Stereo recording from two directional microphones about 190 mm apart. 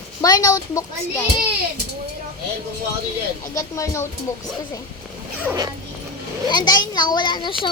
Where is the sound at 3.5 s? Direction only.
15° left (ahead or behind).